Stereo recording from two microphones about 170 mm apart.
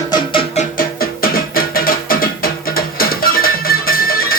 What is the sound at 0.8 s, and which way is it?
Music, 60° left (ahead or behind).